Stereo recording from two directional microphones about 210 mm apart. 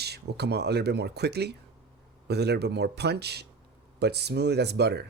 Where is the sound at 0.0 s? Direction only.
50° right (ahead or behind).